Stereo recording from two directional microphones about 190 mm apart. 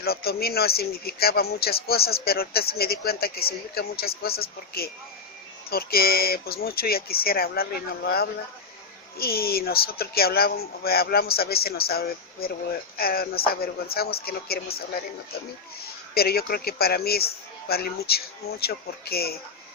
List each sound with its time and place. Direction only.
0.0 s speech: 55° left (ahead or behind)
16.1 s speech: 55° left (ahead or behind)